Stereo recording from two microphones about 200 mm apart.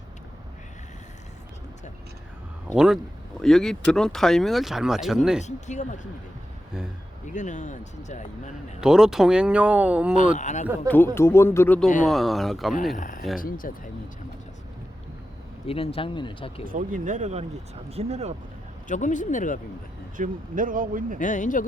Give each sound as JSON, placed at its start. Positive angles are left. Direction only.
{"t": 2.7, "sound": "speech", "side_deg": -5}
{"t": 5.4, "sound": "speech", "side_deg": 35}
{"t": 7.3, "sound": "speech", "side_deg": 40}
{"t": 8.8, "sound": "speech", "side_deg": -5}
{"t": 10.3, "sound": "speech", "side_deg": 35}
{"t": 10.8, "sound": "speech", "side_deg": 10}
{"t": 13.0, "sound": "speech", "side_deg": 40}
{"t": 15.6, "sound": "speech", "side_deg": 30}
{"t": 16.6, "sound": "speech", "side_deg": -40}
{"t": 18.9, "sound": "speech", "side_deg": 40}
{"t": 20.1, "sound": "speech", "side_deg": -40}
{"t": 21.2, "sound": "speech", "side_deg": 40}